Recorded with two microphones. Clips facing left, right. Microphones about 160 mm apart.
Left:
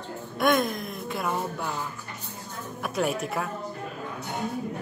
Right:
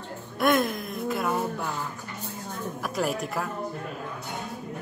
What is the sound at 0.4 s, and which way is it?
A woman's voice, centre (ahead or behind).